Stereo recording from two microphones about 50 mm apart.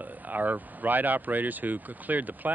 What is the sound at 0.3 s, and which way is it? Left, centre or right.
Speech, right.